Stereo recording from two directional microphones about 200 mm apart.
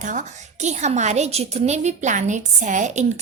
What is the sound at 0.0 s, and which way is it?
A woman's voice, 40° right (ahead or behind).